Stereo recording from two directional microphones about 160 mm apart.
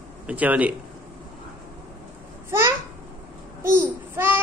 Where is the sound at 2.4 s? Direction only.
15° right (ahead or behind).